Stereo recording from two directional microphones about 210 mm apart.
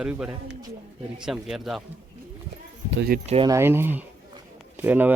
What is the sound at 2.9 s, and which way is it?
Speech, 50° right (ahead or behind).